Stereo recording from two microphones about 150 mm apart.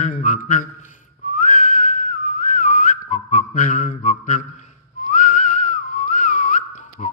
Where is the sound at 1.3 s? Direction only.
60° left (ahead or behind).